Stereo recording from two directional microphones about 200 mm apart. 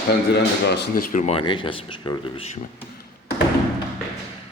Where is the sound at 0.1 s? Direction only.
55° left (ahead or behind).